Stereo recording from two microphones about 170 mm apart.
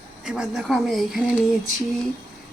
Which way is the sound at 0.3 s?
5° right (ahead or behind).